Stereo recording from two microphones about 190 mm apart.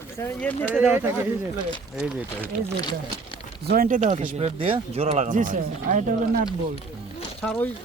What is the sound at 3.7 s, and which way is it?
Speech, 45° right (ahead or behind).